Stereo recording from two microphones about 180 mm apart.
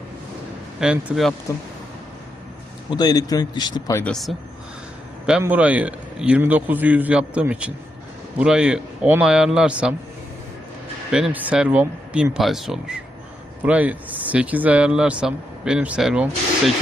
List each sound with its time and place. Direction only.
0.8 s speech: centre (ahead or behind)
2.9 s speech: 20° left (ahead or behind)
4.0 s speech: centre (ahead or behind)
5.4 s speech: 10° right (ahead or behind)
11.1 s speech: 5° right (ahead or behind)